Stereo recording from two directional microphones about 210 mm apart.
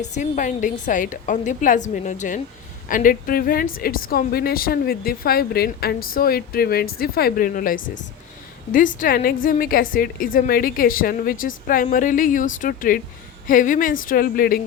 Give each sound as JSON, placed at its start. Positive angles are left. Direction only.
{"t": 0.0, "sound": "a woman's voice", "side_deg": 35}